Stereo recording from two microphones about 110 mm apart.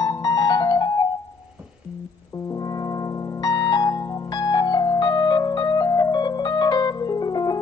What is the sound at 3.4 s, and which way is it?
Keyboard, 40° left (ahead or behind).